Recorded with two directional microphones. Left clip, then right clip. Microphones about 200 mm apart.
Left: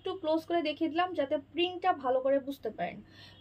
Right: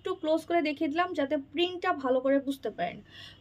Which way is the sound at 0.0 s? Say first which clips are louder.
Right 2 dB; 30° right (ahead or behind).